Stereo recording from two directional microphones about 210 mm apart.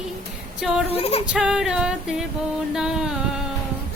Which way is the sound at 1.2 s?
5° right (ahead or behind).